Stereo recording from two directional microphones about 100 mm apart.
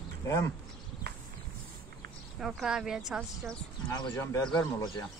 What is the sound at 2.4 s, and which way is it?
Speech, 5° right (ahead or behind).